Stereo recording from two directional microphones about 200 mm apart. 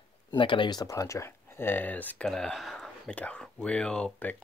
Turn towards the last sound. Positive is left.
turn(degrees=5)  # may be behind; listen again after turning